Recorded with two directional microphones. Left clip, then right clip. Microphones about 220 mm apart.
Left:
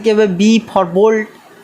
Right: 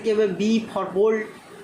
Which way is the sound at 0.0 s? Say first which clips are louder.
Left 9 dB; 40° left (ahead or behind).